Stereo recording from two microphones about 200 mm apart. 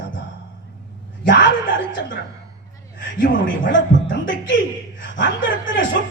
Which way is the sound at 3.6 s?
65° left (ahead or behind).